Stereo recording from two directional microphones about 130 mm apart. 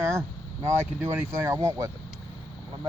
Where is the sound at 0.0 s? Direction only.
20° right (ahead or behind).